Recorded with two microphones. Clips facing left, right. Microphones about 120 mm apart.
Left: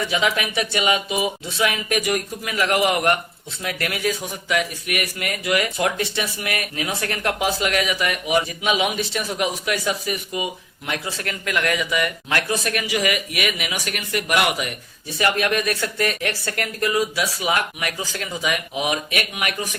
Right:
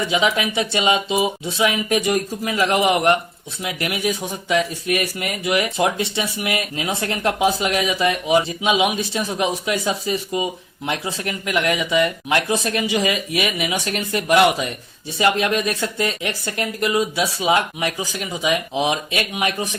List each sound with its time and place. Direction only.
0.0 s speech: 20° right (ahead or behind)